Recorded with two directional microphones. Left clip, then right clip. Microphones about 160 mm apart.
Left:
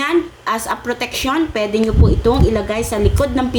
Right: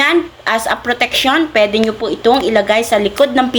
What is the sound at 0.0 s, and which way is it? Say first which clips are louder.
A woman's voice: right 4 dB; 20° left (ahead or behind).